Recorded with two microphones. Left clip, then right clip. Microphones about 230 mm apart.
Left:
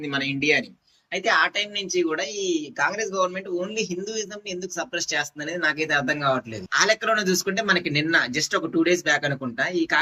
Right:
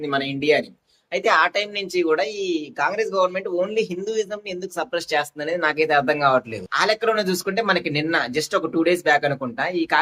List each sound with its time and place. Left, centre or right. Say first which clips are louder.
0.0 s speech: right 2 dB; centre